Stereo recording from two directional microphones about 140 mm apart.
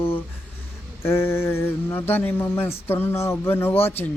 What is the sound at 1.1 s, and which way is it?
Speech, 15° left (ahead or behind).